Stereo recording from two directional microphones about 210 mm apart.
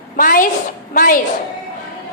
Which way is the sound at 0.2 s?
40° left (ahead or behind).